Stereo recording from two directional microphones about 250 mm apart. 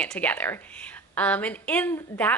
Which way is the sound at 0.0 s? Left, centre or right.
Centre.